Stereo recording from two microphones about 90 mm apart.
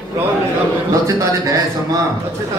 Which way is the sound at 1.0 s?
40° right (ahead or behind).